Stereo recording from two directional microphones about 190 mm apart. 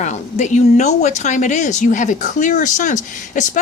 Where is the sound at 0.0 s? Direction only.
40° left (ahead or behind).